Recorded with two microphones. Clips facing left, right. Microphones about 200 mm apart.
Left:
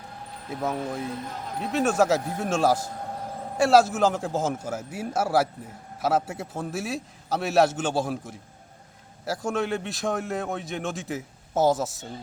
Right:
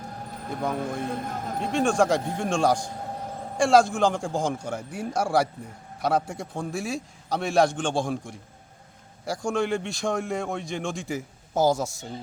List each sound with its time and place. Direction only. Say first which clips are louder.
1.0 s speech: right 3 dB; 55° right (ahead or behind)
1.5 s a man's voice: even; 5° left (ahead or behind)